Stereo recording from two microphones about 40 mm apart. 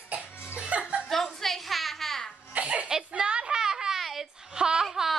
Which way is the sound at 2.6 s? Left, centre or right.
Right.